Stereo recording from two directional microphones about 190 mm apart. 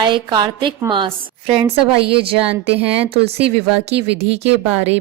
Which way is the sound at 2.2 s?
30° right (ahead or behind).